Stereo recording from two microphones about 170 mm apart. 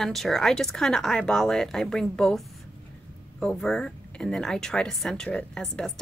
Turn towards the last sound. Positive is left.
turn(degrees=5)  # may be behind; listen again after turning